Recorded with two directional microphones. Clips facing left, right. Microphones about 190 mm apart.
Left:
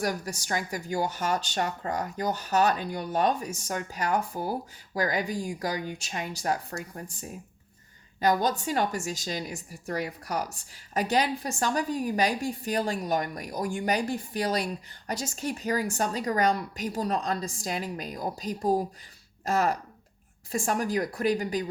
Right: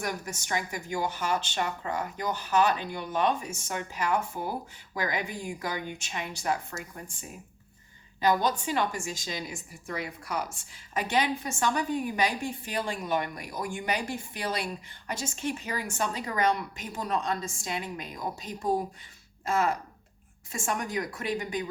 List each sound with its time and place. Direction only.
0.0 s a woman's voice: 35° left (ahead or behind)